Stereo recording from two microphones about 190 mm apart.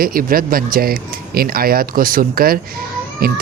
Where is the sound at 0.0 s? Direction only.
50° right (ahead or behind).